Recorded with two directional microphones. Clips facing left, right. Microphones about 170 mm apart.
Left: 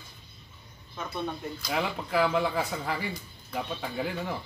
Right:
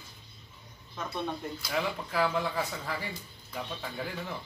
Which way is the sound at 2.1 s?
80° left.